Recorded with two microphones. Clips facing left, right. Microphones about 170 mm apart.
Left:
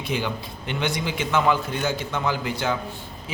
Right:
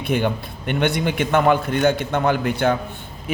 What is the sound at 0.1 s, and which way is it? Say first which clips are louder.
A man's voice: right 7 dB; 55° right (ahead or behind).